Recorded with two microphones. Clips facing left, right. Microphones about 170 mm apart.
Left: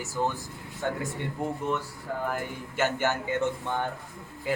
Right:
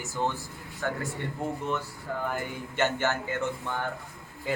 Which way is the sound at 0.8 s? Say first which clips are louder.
Left 1 dB; 20° left (ahead or behind).